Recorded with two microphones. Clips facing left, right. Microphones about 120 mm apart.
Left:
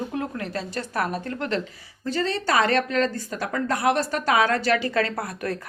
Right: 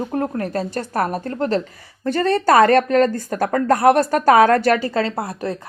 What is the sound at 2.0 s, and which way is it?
Speech, 55° right (ahead or behind).